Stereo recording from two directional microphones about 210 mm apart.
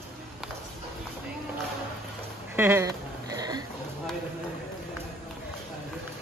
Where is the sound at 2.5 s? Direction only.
10° right (ahead or behind).